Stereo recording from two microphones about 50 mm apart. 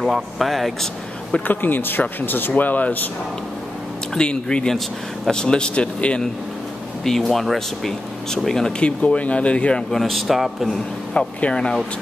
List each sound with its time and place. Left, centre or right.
0.0 s a man's voice: centre
1.5 s speech: left
4.1 s speech: centre
4.6 s speech: centre; by 6.2 s left
7.1 s speech: centre
8.7 s speech: left
9.8 s a man's voice: centre
11.1 s speech: centre